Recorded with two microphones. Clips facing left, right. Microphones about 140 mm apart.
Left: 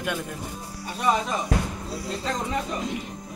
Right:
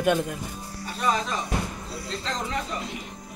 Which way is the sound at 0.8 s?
15° left (ahead or behind).